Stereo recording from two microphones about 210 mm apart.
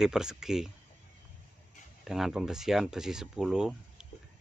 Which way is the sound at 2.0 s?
Centre (ahead or behind).